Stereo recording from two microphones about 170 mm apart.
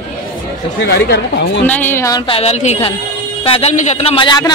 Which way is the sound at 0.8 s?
75° left (ahead or behind).